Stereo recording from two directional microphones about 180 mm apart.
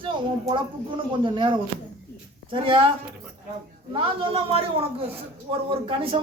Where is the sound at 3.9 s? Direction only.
30° right (ahead or behind).